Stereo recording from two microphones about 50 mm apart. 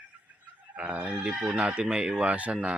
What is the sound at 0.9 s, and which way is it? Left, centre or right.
Speech, right.